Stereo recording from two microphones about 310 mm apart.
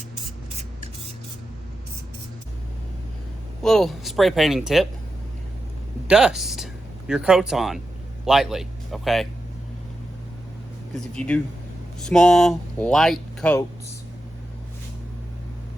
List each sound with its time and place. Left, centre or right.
0.5 s spray: right
3.6 s speech: centre
6.1 s speech: centre
10.9 s speech: centre